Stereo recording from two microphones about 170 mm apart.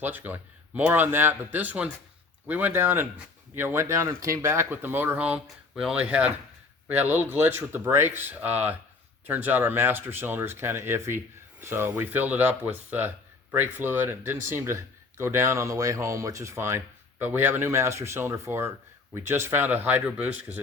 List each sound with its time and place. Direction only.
0.0 s speech: 10° right (ahead or behind)